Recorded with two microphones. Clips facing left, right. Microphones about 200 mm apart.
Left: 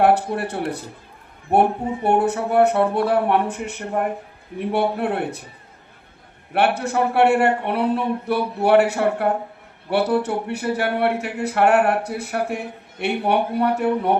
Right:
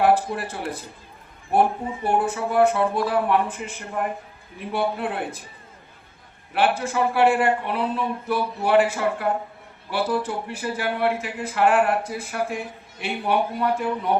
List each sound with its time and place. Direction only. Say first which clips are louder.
0.0 s speech: left 2 dB; 60° left (ahead or behind)
2.0 s speech: left 4 dB; 65° left (ahead or behind)
6.5 s speech: left 2 dB; 60° left (ahead or behind)